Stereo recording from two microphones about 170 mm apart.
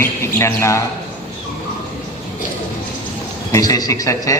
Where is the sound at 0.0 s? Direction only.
15° left (ahead or behind).